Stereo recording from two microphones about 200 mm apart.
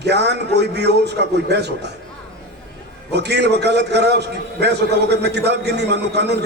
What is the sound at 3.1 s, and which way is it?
A man's voice, 55° right (ahead or behind).